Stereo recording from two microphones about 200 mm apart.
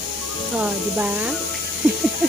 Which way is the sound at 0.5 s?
5° right (ahead or behind).